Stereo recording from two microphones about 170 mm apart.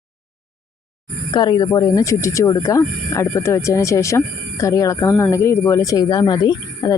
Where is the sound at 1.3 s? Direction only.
25° left (ahead or behind).